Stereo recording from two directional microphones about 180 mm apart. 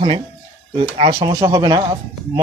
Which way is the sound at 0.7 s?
30° right (ahead or behind).